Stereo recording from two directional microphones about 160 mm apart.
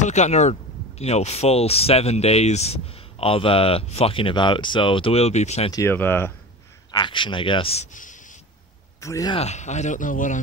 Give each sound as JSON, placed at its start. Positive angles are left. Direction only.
{"t": 0.0, "sound": "speech", "side_deg": 45}
{"t": 5.7, "sound": "speech", "side_deg": 15}
{"t": 6.9, "sound": "a man's voice", "side_deg": 30}
{"t": 9.0, "sound": "speech", "side_deg": 20}
{"t": 9.3, "sound": "speech", "side_deg": 45}